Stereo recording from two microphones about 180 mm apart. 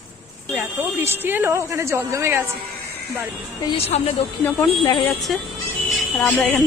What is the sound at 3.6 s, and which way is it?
Speech, 30° left (ahead or behind).